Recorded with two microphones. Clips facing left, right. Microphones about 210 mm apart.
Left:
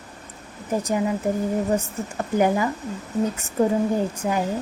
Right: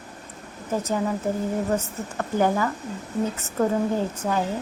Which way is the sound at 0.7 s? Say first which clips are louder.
Left 2 dB; 15° left (ahead or behind).